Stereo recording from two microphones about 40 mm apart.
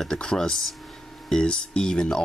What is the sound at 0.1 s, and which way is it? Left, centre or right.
Speech, centre.